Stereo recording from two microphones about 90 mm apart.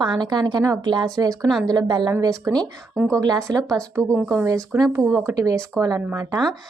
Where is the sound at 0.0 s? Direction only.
55° right (ahead or behind).